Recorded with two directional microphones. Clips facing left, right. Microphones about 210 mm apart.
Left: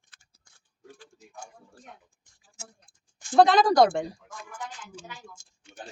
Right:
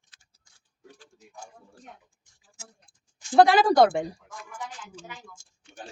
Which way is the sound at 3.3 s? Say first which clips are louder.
Right 1 dB; 10° right (ahead or behind).